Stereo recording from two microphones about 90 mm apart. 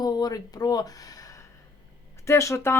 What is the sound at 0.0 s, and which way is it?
Speech, 45° left (ahead or behind).